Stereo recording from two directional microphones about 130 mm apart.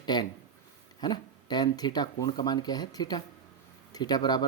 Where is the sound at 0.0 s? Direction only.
35° left (ahead or behind).